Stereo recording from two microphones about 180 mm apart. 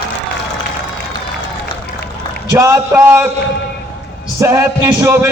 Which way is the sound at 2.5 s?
15° right (ahead or behind).